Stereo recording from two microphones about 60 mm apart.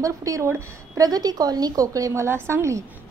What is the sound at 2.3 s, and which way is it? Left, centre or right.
Speech, right.